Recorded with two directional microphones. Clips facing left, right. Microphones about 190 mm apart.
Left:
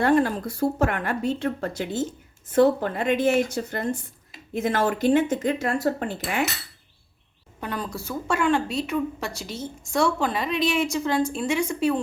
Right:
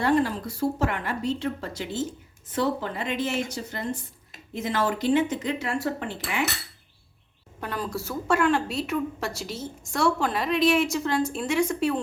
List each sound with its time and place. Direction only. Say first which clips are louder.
0.0 s speech: left 3 dB; 50° left (ahead or behind)
7.6 s a woman's voice: even; centre (ahead or behind)